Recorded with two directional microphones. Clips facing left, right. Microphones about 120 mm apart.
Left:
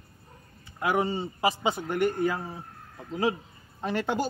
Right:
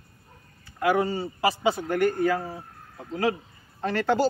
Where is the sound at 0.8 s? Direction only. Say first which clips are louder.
Right 3 dB; 20° left (ahead or behind).